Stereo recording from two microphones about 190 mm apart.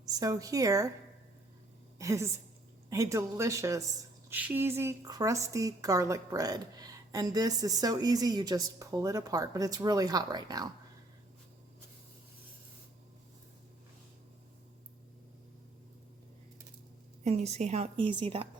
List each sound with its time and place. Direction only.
0.0 s speech: 20° right (ahead or behind)
2.0 s a woman's voice: 15° right (ahead or behind)
17.2 s a woman's voice: 35° right (ahead or behind)